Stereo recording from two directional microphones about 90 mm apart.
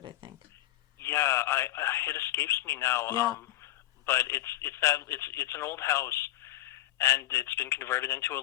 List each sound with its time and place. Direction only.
0.9 s speech: 30° left (ahead or behind)